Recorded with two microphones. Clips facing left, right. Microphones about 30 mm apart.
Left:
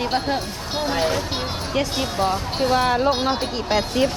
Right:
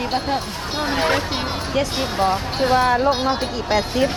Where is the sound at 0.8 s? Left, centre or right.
Centre.